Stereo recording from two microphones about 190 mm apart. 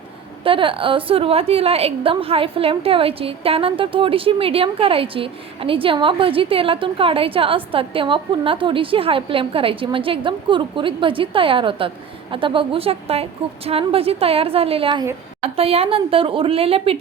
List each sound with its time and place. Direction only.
0.4 s a woman's voice: 25° right (ahead or behind)